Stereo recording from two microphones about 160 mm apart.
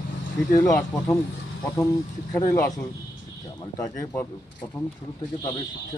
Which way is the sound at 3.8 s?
20° left (ahead or behind).